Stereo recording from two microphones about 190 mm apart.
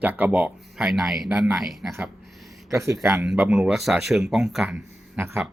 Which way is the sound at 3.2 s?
5° right (ahead or behind).